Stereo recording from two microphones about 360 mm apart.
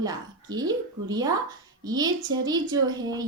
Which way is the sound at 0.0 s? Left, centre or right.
Centre.